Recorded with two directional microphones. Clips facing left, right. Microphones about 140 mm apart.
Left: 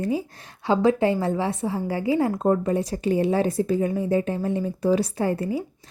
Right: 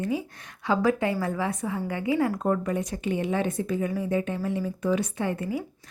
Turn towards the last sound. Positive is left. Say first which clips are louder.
# left 4 dB
turn(degrees=30)  # may be behind; listen again after turning